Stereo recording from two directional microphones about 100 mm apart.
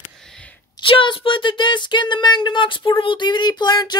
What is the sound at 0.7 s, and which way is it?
Speech, 55° left (ahead or behind).